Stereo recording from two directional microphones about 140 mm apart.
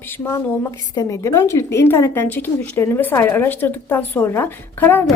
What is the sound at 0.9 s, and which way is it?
A woman's voice, 20° left (ahead or behind).